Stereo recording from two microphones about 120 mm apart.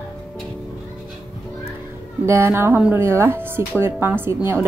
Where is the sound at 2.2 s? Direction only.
20° right (ahead or behind).